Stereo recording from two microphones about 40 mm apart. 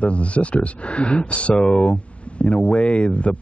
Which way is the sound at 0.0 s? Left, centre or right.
Left.